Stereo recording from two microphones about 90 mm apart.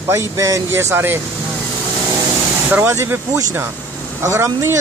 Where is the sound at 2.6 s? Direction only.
20° right (ahead or behind).